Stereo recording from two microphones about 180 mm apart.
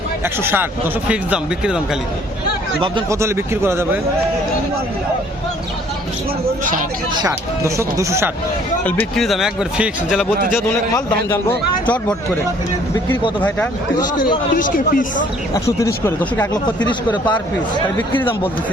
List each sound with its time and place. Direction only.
0.4 s speech: 10° right (ahead or behind)
3.1 s speech: 15° right (ahead or behind)
7.2 s speech: 20° right (ahead or behind)
8.8 s speech: 10° left (ahead or behind)
10.6 s a man's voice: 15° left (ahead or behind)
14.5 s speech: 50° left (ahead or behind)
15.5 s a man's voice: 15° left (ahead or behind)